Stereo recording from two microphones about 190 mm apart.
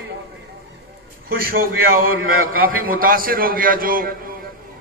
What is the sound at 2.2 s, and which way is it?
Speech, 90° right.